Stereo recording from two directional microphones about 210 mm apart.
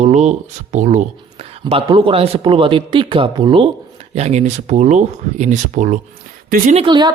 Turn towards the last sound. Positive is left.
turn(degrees=-20)  # may be behind; listen again after turning